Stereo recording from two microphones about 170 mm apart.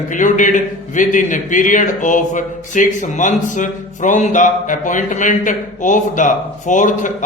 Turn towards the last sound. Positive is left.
turn(degrees=50)  # may be behind; listen again after turning